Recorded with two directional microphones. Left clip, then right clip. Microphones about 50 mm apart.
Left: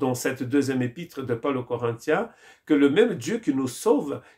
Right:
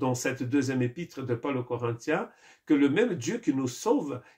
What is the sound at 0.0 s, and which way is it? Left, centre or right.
Speech, left.